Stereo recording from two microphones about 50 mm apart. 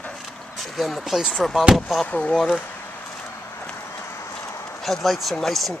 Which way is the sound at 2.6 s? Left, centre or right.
Left.